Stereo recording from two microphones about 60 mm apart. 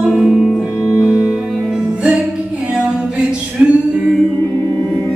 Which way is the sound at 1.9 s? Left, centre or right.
Right.